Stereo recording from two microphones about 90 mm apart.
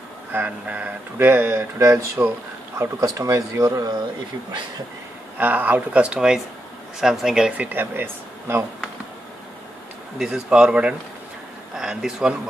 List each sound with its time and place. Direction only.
0.3 s speech: 20° right (ahead or behind); by 4.0 s 45° right (ahead or behind)
5.4 s speech: 20° right (ahead or behind)
10.1 s speech: 10° right (ahead or behind)